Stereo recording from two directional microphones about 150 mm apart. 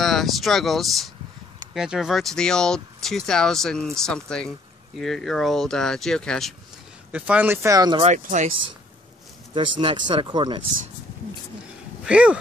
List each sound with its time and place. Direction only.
0.0 s speech: centre (ahead or behind)
7.1 s speech: 10° right (ahead or behind); by 8.0 s 25° right (ahead or behind)
8.0 s speech: 50° right (ahead or behind)
9.5 s speech: 30° right (ahead or behind)
12.0 s speech: 5° right (ahead or behind)